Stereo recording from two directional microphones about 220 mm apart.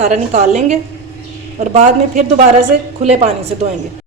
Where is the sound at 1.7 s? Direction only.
30° right (ahead or behind).